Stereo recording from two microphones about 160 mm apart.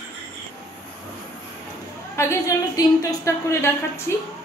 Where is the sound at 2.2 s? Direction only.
15° left (ahead or behind).